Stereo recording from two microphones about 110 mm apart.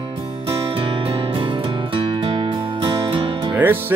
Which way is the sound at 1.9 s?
60° right (ahead or behind).